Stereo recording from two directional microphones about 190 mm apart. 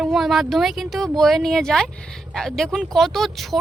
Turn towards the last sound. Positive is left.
turn(degrees=0)  # may be behind; listen again after turning